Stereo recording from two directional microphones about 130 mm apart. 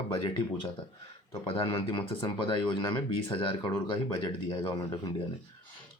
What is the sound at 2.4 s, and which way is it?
Speech, 40° left (ahead or behind).